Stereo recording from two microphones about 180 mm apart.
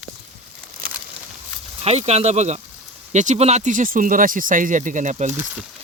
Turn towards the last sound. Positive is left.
turn(degrees=-10)  # may be behind; listen again after turning